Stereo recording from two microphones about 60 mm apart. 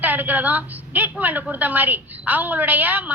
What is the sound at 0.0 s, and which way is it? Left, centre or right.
A woman's voice, right.